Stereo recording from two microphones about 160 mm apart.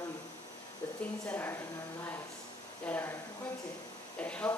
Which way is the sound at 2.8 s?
15° left (ahead or behind).